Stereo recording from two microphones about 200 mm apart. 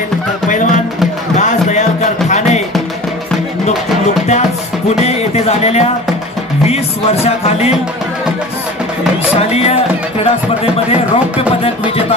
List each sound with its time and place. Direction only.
0.5 s music: 40° left (ahead or behind)
4.8 s music: 30° left (ahead or behind)
7.2 s speech: 30° left (ahead or behind)
9.4 s speech: 30° left (ahead or behind)